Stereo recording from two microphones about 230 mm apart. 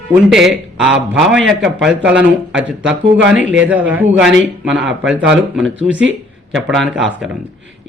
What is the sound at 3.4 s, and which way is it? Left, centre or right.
Speech, right.